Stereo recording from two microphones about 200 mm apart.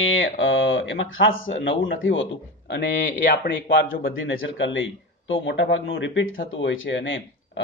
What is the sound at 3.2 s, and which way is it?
Speech, 50° left (ahead or behind).